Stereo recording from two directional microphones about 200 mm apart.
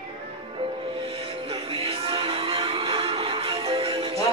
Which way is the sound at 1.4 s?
30° right (ahead or behind).